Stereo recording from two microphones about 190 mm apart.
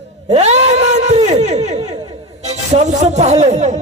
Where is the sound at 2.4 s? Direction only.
35° right (ahead or behind).